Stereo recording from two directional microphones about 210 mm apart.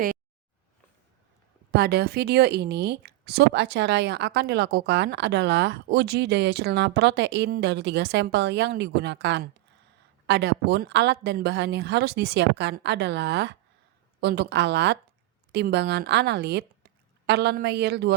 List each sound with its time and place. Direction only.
1.7 s a woman's voice: 50° right (ahead or behind)